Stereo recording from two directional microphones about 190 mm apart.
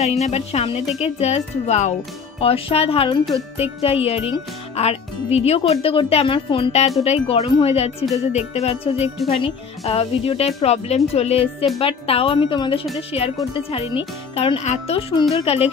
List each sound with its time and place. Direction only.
0.0 s a woman's voice: 35° left (ahead or behind)